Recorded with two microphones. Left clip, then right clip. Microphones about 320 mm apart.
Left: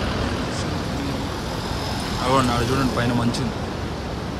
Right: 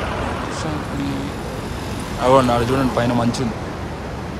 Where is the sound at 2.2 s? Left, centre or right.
Centre.